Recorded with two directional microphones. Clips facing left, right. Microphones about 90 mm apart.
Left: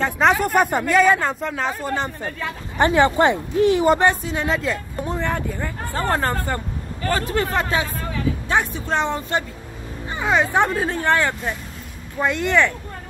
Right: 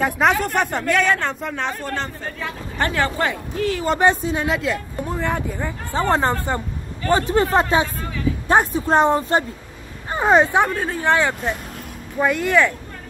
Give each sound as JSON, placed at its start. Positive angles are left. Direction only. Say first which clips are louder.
{"t": 0.0, "sound": "speech", "louder": "even", "side_deg": 0}
{"t": 2.8, "sound": "speech", "louder": "left 5 dB", "side_deg": 20}
{"t": 4.0, "sound": "speech", "louder": "right 2 dB", "side_deg": -20}
{"t": 4.5, "sound": "speech", "louder": "right 1 dB", "side_deg": 0}
{"t": 5.2, "sound": "speech", "louder": "right 1 dB", "side_deg": -15}
{"t": 10.7, "sound": "speech", "louder": "left 1 dB", "side_deg": 5}
{"t": 11.0, "sound": "speech", "louder": "right 3 dB", "side_deg": -15}